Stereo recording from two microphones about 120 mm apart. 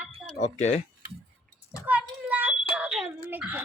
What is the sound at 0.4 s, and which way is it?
Speech, 70° left (ahead or behind).